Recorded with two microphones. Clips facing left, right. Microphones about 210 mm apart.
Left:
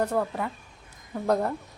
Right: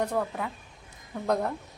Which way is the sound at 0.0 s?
5° left (ahead or behind).